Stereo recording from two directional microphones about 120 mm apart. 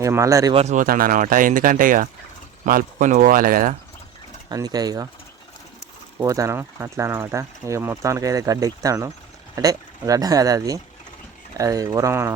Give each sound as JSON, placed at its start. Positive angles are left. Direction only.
{"t": 0.0, "sound": "speech", "side_deg": -25}
{"t": 0.5, "sound": "speech", "side_deg": -75}
{"t": 4.4, "sound": "speech", "side_deg": -35}
{"t": 6.1, "sound": "speech", "side_deg": -25}